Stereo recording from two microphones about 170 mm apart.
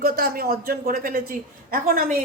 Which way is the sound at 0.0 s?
60° right (ahead or behind).